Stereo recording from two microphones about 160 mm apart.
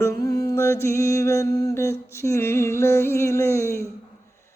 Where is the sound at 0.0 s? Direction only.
20° left (ahead or behind).